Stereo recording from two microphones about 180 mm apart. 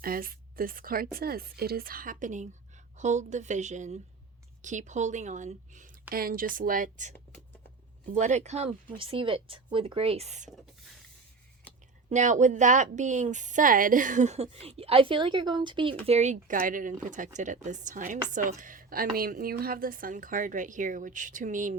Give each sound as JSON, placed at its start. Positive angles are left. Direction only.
{"t": 0.0, "sound": "speech", "side_deg": -55}
{"t": 8.1, "sound": "speech", "side_deg": -40}
{"t": 12.0, "sound": "speech", "side_deg": -40}
{"t": 16.0, "sound": "speech", "side_deg": -40}